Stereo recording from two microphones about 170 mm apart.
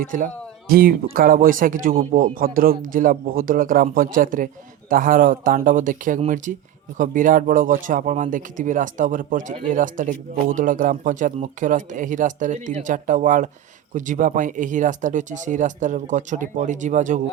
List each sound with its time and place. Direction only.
0.0 s a man's voice: 50° right (ahead or behind)